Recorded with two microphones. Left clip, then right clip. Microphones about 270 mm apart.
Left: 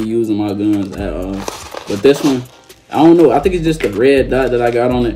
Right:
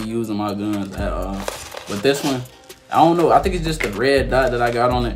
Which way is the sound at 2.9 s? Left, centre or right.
Centre.